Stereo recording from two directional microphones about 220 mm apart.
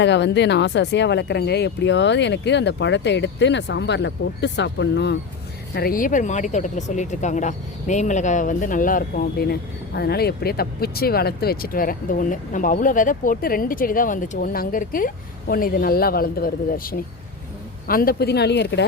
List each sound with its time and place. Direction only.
0.0 s speech: 55° left (ahead or behind)
5.7 s speech: 40° left (ahead or behind)